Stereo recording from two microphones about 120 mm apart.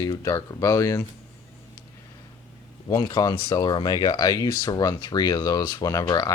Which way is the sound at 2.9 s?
30° left (ahead or behind).